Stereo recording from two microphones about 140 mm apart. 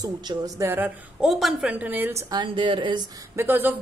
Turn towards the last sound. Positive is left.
turn(degrees=-15)  # may be behind; listen again after turning